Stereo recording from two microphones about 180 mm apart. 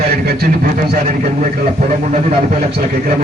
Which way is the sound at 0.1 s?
60° right (ahead or behind).